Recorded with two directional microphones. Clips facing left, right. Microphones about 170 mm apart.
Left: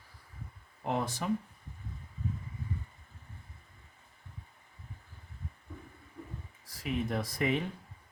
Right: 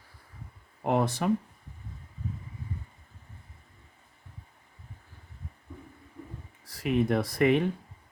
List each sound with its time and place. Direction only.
0.9 s speech: 65° right (ahead or behind)
6.8 s speech: 65° right (ahead or behind)